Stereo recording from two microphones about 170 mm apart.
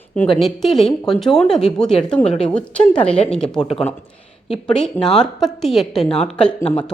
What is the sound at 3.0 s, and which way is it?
Speech, 35° left (ahead or behind).